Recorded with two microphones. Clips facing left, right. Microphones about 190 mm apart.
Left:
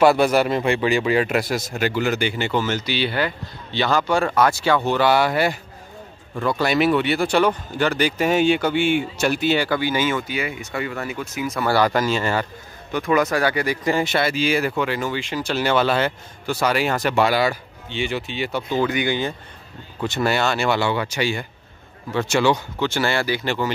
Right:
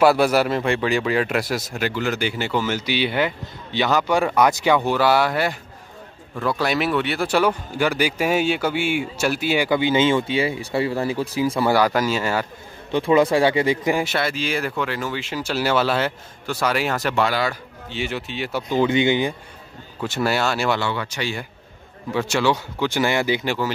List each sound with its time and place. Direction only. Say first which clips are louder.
0.0 s speech: left 1 dB; 5° right (ahead or behind); by 11.6 s 30° right (ahead or behind)
11.6 s speech: left 1 dB; 10° right (ahead or behind)
12.9 s speech: right 3 dB; 30° right (ahead or behind)
13.9 s speech: left 2 dB; centre (ahead or behind)
17.8 s speech: left 2 dB; centre (ahead or behind)
18.7 s speech: right 4 dB; 20° right (ahead or behind)
20.0 s speech: left 1 dB; 5° right (ahead or behind)
20.8 s speech: left 4 dB; 15° left (ahead or behind)
22.1 s speech: left 1 dB; 5° right (ahead or behind)
22.8 s speech: right 2 dB; 15° right (ahead or behind)